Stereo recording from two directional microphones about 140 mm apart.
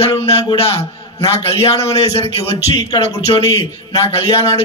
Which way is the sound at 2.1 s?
45° left (ahead or behind).